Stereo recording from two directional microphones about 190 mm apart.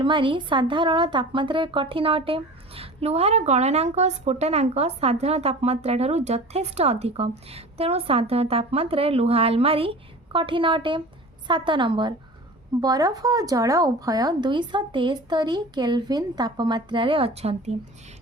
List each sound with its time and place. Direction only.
0.0 s a woman's voice: 25° right (ahead or behind)